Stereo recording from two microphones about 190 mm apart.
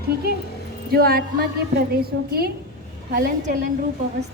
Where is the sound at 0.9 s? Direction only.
55° right (ahead or behind).